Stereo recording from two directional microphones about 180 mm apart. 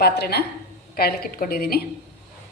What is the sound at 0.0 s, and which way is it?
A woman's voice, 65° left (ahead or behind).